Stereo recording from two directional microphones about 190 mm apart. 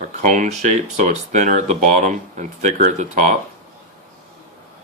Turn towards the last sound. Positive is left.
turn(degrees=-40)  # may be behind; listen again after turning